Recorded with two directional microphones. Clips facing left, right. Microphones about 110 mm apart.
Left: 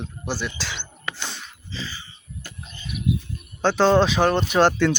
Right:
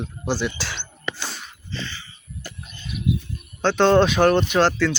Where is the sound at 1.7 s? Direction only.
5° left (ahead or behind).